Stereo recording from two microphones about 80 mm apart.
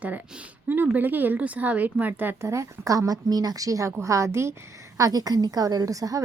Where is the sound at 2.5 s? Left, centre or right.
Right.